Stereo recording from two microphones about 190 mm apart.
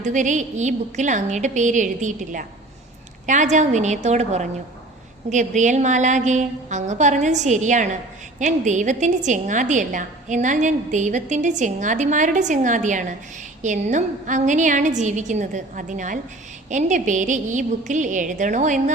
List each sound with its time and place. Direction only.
0.0 s a woman's voice: 40° right (ahead or behind)